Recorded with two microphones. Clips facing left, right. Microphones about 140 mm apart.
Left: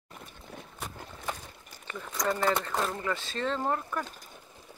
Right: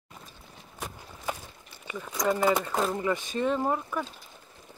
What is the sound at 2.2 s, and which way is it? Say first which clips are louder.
Speech: right 3 dB; 10° right (ahead or behind).